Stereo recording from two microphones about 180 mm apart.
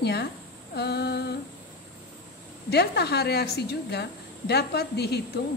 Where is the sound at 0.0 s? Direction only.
65° left (ahead or behind).